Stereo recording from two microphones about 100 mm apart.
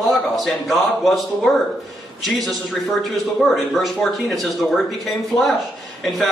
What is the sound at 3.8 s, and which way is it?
A man's voice, centre (ahead or behind).